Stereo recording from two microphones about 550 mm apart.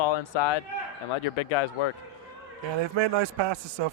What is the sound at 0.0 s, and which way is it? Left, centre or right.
Speech, left.